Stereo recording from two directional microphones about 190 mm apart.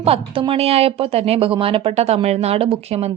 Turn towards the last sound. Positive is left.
turn(degrees=-35)  # may be behind; listen again after turning